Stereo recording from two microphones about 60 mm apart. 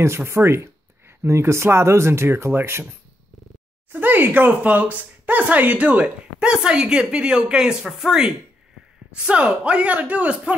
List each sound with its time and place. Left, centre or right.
0.0 s speech: right
3.9 s speech: right